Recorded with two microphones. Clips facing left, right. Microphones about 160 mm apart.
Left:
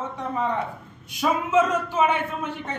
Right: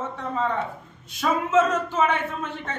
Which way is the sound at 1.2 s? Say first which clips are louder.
Even; 10° left (ahead or behind).